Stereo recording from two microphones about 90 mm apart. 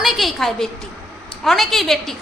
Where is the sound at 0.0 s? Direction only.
Centre (ahead or behind).